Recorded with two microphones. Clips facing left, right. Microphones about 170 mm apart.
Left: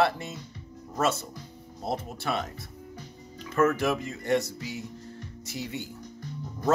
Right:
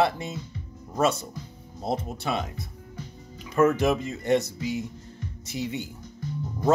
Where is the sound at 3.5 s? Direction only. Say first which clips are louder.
Right 3 dB; 20° right (ahead or behind).